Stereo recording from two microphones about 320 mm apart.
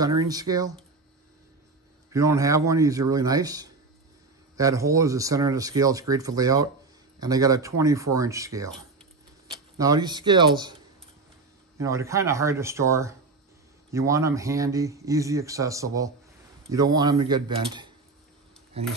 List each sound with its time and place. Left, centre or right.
0.0 s speech: centre
2.1 s speech: centre
9.8 s speech: centre
11.8 s speech: centre